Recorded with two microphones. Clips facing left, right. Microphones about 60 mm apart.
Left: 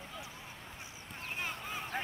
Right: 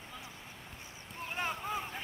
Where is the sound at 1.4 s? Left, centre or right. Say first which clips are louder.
Right 5 dB; right.